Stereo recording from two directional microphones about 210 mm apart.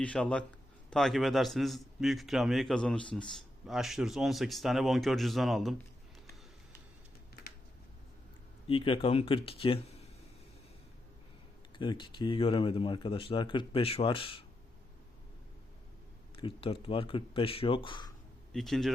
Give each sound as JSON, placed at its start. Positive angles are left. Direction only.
{"t": 0.0, "sound": "a man's voice", "side_deg": 5}
{"t": 8.6, "sound": "speech", "side_deg": 25}
{"t": 11.8, "sound": "speech", "side_deg": 20}
{"t": 16.3, "sound": "speech", "side_deg": 25}
{"t": 18.5, "sound": "a man's voice", "side_deg": 0}